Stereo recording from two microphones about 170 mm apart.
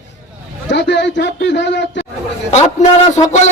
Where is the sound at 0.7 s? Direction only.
90° left.